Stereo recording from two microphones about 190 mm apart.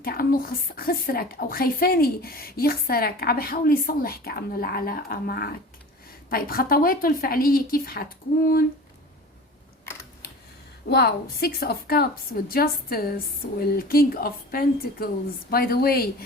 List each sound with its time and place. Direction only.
0.0 s a woman's voice: 50° left (ahead or behind)
10.8 s a woman's voice: 60° left (ahead or behind)